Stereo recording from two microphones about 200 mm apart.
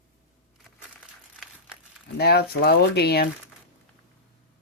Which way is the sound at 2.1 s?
55° left (ahead or behind).